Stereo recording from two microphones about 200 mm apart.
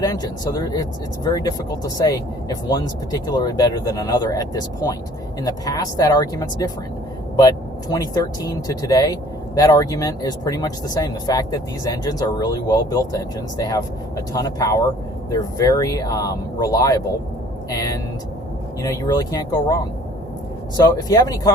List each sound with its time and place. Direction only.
0.0 s speech: 20° left (ahead or behind)